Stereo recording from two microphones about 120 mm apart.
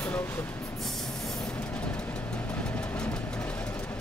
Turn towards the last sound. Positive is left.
turn(degrees=10)  # may be behind; listen again after turning